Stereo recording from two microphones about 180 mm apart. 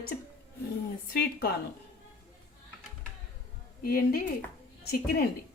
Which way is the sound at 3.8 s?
55° left (ahead or behind).